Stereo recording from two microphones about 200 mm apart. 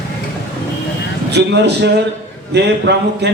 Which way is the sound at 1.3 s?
55° right (ahead or behind).